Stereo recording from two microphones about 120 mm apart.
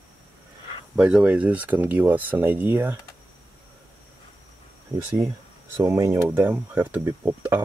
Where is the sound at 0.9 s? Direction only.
10° right (ahead or behind).